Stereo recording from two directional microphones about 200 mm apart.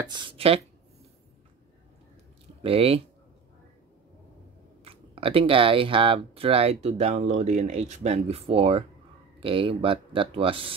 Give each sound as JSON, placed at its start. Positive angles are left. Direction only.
{"t": 0.1, "sound": "speech", "side_deg": -25}
{"t": 2.6, "sound": "speech", "side_deg": -30}
{"t": 4.8, "sound": "speech", "side_deg": -30}